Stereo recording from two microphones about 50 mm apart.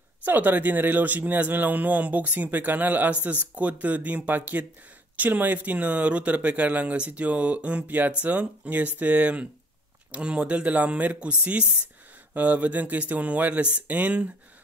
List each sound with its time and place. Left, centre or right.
0.2 s speech: right